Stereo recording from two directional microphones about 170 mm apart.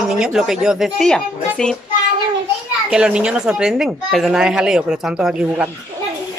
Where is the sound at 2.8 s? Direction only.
5° right (ahead or behind).